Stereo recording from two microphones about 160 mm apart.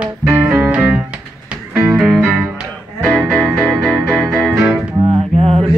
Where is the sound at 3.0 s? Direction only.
5° left (ahead or behind).